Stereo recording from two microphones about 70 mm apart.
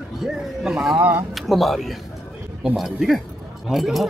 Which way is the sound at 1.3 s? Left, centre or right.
Centre.